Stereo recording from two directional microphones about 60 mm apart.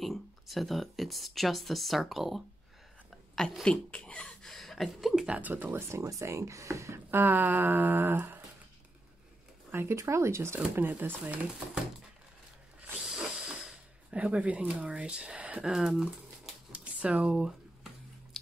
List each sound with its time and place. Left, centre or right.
0.0 s speech: centre
3.6 s speech: centre
4.5 s speech: centre
5.2 s speech: right
5.5 s speech: right
7.1 s a sound: right
9.7 s speech: right
9.9 s speech: right
11.0 s a sound: right
12.9 s a sound: centre
15.7 s speech: centre
16.7 s speech: right
18.3 s chewing: centre